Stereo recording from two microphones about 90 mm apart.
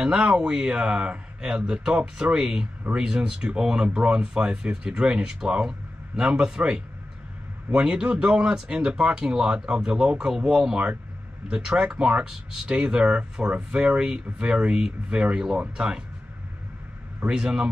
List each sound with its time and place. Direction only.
0.0 s speech: 10° right (ahead or behind)
17.3 s speech: 10° right (ahead or behind)